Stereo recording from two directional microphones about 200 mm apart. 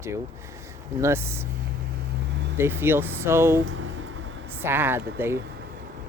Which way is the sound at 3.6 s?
75° right (ahead or behind).